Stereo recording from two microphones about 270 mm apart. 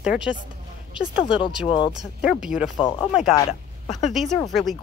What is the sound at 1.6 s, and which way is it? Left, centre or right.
Speech, centre.